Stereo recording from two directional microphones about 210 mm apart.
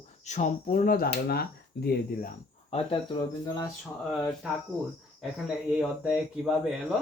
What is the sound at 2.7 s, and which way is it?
Speech, 25° left (ahead or behind).